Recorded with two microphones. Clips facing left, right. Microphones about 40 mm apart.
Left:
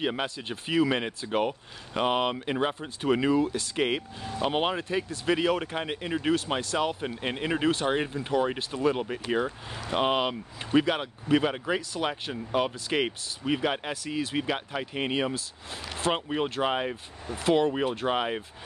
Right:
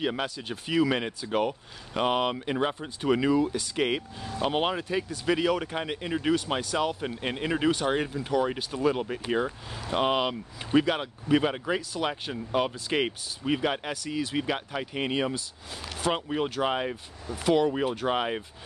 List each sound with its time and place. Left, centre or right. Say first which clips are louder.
0.0 s speech: even; centre
17.3 s speech: even; left
17.7 s speech: even; centre